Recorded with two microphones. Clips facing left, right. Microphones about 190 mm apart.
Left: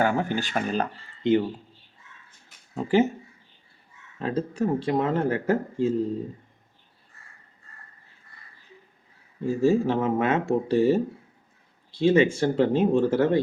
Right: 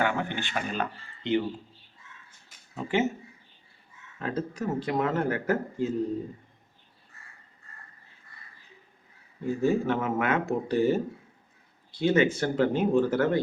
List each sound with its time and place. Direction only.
0.0 s speech: 40° left (ahead or behind)
2.7 s speech: 35° left (ahead or behind)
4.2 s speech: 30° left (ahead or behind)
9.4 s speech: 30° left (ahead or behind)
11.9 s speech: 25° left (ahead or behind)